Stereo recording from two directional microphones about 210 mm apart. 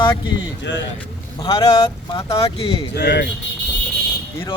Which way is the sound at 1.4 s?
20° left (ahead or behind).